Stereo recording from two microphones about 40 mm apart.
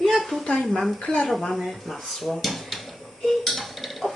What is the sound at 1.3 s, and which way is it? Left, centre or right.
Speech, centre.